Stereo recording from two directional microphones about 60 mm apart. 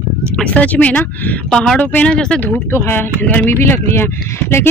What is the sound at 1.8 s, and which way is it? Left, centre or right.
Speech, left.